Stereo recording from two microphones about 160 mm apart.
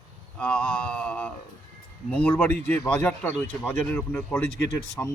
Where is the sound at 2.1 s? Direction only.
10° left (ahead or behind).